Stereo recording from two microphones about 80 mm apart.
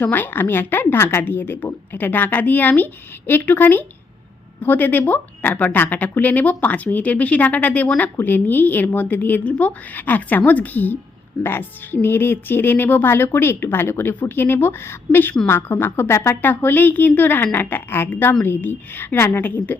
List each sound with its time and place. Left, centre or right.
0.0 s a woman's voice: left